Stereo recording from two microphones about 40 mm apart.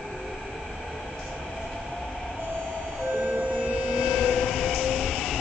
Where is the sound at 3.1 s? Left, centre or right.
Right.